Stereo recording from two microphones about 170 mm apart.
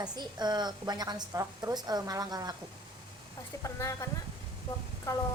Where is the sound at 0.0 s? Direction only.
25° right (ahead or behind).